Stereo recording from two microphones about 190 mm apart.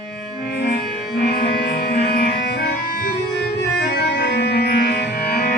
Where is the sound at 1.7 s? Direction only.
55° left (ahead or behind).